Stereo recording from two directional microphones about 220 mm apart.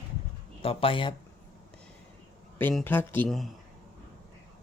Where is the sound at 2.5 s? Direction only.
10° left (ahead or behind).